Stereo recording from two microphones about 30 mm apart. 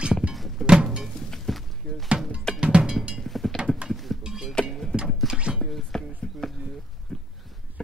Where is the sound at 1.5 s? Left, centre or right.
Centre.